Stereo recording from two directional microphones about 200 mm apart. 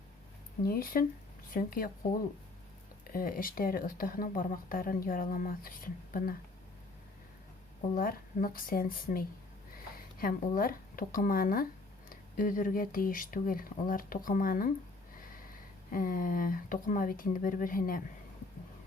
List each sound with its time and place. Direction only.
0.6 s speech: 45° left (ahead or behind)
3.1 s speech: 45° left (ahead or behind)
7.9 s speech: 45° left (ahead or behind)
15.9 s speech: 45° left (ahead or behind)